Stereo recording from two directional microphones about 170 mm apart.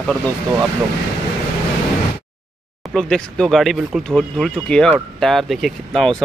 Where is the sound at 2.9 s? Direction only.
5° left (ahead or behind).